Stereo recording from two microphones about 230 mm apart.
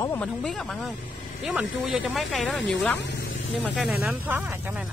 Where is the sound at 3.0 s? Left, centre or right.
Left.